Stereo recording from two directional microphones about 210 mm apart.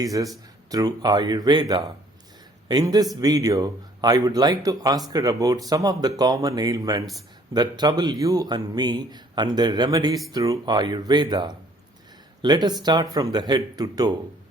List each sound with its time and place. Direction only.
0.0 s a man's voice: 15° right (ahead or behind)